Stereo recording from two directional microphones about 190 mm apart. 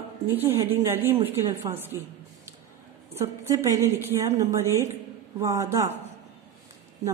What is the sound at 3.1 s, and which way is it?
A woman's voice, 15° right (ahead or behind).